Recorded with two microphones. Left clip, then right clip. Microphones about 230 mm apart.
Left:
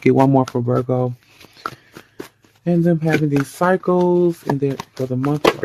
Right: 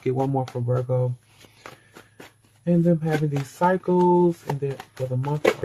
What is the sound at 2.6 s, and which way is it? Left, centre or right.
Speech, left.